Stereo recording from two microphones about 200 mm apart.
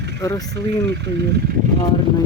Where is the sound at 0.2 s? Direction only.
15° left (ahead or behind).